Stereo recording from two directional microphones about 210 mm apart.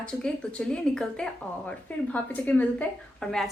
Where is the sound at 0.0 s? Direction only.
5° left (ahead or behind).